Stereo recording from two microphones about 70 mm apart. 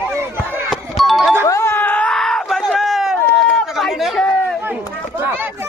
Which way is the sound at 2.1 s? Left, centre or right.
Centre.